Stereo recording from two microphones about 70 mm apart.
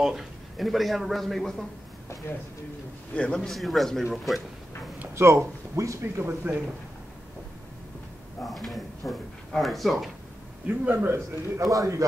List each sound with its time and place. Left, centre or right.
0.0 s a man's voice: centre
3.2 s a man's voice: centre
3.4 s a man's voice: centre
5.1 s speech: right
6.2 s speech: right
8.4 s speech: centre
10.7 s speech: right
11.1 s a man's voice: right